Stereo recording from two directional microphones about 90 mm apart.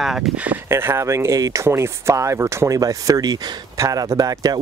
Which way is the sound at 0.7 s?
30° right (ahead or behind).